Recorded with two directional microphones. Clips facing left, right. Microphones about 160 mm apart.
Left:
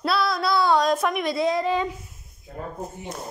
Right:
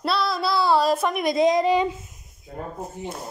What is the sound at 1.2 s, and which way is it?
Speech, 20° right (ahead or behind).